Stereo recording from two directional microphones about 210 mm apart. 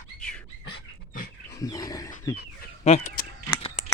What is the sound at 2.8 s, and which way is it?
Speech, 30° left (ahead or behind).